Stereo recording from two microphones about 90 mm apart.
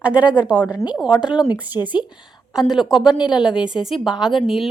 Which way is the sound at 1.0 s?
10° right (ahead or behind).